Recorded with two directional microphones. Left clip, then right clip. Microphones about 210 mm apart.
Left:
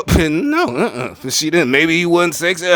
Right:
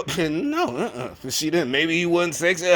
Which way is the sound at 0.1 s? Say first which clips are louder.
Left 9 dB; 35° left (ahead or behind).